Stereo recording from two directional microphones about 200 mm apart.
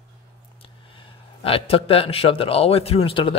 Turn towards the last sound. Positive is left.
turn(degrees=25)  # may be behind; listen again after turning